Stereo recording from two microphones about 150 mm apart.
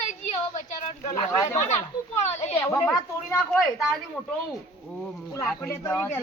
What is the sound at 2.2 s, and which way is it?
Speech, 50° left (ahead or behind).